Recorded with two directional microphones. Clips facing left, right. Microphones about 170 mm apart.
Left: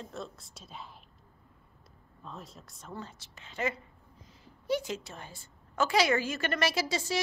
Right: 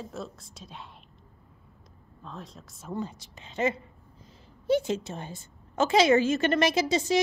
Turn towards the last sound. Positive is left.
turn(degrees=-20)  # may be behind; listen again after turning